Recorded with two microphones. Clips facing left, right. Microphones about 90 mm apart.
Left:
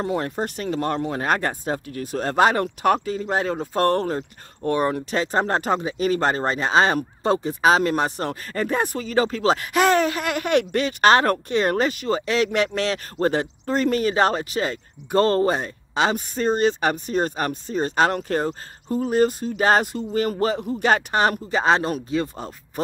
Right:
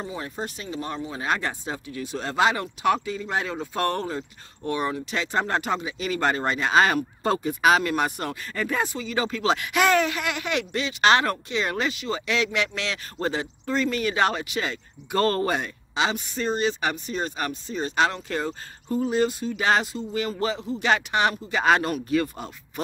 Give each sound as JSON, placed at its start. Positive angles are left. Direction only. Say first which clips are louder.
{"t": 0.0, "sound": "speech", "louder": "left 7 dB", "side_deg": 60}
{"t": 15.9, "sound": "speech", "louder": "left 4 dB", "side_deg": 45}